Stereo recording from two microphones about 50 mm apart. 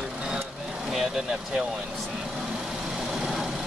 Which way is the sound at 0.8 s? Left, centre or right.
Centre.